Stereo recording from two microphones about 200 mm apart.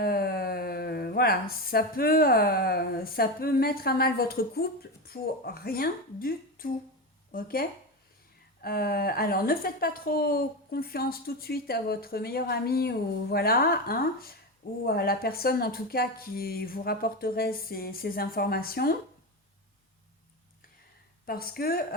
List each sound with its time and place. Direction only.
0.0 s a woman's voice: 50° left (ahead or behind)
21.2 s a woman's voice: 50° left (ahead or behind)